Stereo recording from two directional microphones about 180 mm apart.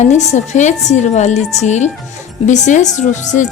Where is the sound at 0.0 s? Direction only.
40° left (ahead or behind).